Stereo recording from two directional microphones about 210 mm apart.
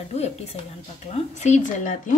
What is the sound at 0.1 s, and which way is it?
Speech, 30° left (ahead or behind).